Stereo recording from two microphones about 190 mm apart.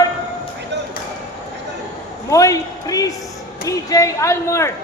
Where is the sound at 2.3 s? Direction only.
15° left (ahead or behind).